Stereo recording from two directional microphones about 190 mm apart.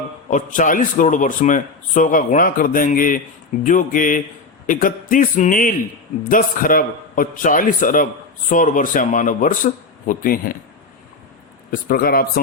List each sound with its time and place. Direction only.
0.3 s speech: 40° left (ahead or behind)
11.7 s speech: 50° left (ahead or behind)